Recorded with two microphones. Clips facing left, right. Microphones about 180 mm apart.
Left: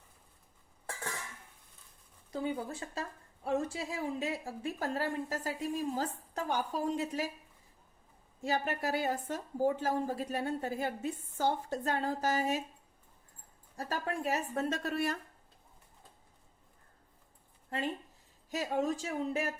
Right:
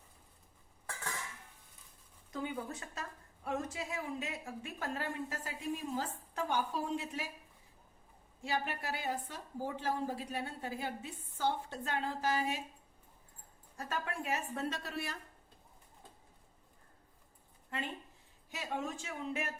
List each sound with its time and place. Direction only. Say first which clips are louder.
2.3 s a woman's voice: left 4 dB; 30° left (ahead or behind)
8.4 s a woman's voice: left 4 dB; 40° left (ahead or behind)
13.7 s a woman's voice: left 4 dB; 35° left (ahead or behind)
18.5 s a woman's voice: left 7 dB; 40° left (ahead or behind)